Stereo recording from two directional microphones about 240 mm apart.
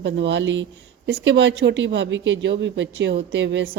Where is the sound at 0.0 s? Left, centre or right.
Right.